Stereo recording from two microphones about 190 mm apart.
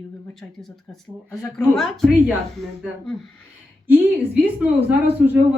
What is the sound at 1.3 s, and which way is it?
Speech, 15° left (ahead or behind).